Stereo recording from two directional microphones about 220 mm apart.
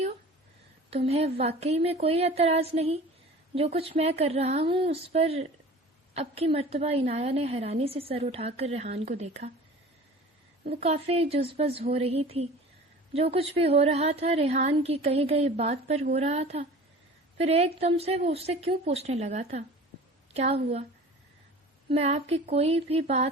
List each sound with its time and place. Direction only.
0.9 s a woman's voice: 25° right (ahead or behind)
10.7 s a woman's voice: 30° right (ahead or behind)
21.8 s a woman's voice: 30° right (ahead or behind)